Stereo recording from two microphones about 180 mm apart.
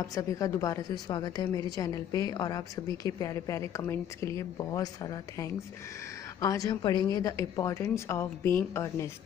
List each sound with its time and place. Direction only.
0.0 s a woman's voice: 20° left (ahead or behind)